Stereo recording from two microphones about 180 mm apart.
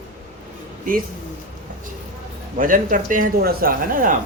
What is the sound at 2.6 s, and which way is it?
Speech, 50° right (ahead or behind).